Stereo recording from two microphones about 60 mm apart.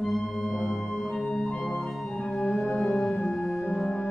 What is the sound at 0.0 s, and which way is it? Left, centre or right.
Organ, centre.